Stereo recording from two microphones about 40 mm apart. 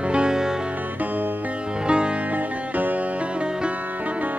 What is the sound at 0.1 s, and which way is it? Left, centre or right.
Music, centre.